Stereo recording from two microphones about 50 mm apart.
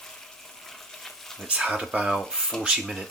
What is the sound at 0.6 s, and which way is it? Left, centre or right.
Frying, centre.